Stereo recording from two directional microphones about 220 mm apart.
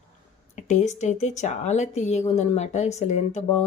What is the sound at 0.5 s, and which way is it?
Speech, 35° left (ahead or behind).